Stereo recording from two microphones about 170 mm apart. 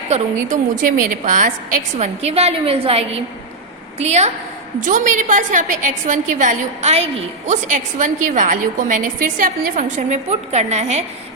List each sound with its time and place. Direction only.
0.4 s a woman's voice: 50° right (ahead or behind)
2.0 s a woman's voice: 40° right (ahead or behind)